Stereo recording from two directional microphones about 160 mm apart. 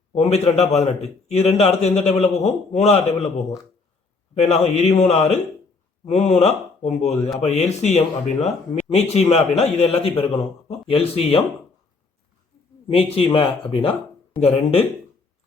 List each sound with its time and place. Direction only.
0.1 s a man's voice: 40° left (ahead or behind)
4.4 s a man's voice: 40° left (ahead or behind)
12.9 s a man's voice: 35° left (ahead or behind)